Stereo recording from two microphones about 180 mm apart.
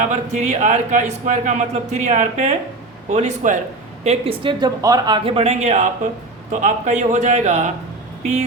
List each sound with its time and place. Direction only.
0.0 s speech: 40° right (ahead or behind)